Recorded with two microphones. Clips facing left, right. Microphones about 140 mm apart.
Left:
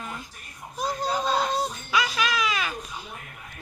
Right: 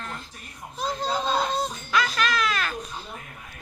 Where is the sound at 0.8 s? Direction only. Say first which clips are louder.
Even; 10° left (ahead or behind).